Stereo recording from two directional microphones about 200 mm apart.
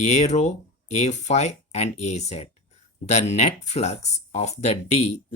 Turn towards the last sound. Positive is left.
turn(degrees=35)  # may be behind; listen again after turning